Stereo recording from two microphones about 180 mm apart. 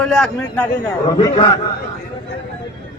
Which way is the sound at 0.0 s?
5° left (ahead or behind).